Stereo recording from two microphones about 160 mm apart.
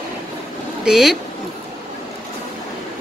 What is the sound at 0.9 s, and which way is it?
Speech, 5° right (ahead or behind).